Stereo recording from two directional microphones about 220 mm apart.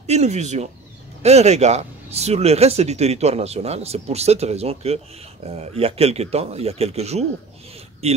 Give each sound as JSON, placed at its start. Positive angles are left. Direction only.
{"t": 0.0, "sound": "speech", "side_deg": -30}